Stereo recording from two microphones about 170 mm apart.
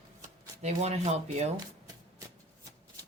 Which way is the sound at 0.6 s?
40° right (ahead or behind).